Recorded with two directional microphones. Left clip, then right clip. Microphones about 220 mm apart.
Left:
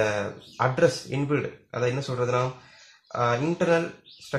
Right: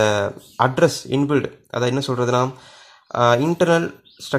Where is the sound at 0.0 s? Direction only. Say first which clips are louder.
Right 7 dB; 45° right (ahead or behind).